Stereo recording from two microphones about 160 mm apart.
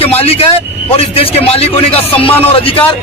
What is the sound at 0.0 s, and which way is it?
Speech, 40° left (ahead or behind).